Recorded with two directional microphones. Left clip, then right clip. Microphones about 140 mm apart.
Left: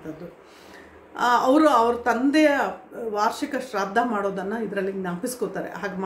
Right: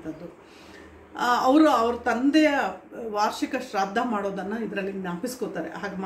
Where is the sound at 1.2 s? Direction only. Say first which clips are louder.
Left 1 dB; 30° left (ahead or behind).